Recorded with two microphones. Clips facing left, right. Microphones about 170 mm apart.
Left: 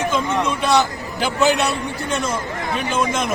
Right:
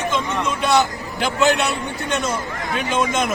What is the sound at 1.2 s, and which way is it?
Speech, centre (ahead or behind).